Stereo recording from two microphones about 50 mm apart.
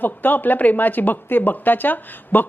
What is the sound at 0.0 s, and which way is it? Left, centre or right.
Speech, left.